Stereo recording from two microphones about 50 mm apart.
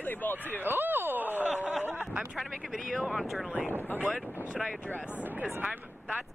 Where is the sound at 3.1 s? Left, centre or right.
Centre.